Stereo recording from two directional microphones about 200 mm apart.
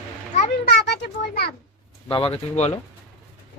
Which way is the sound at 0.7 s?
55° left (ahead or behind).